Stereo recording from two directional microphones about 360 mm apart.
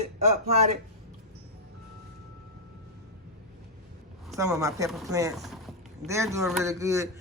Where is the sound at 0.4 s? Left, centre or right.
Centre.